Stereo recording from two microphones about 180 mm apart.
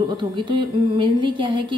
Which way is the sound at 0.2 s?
25° right (ahead or behind).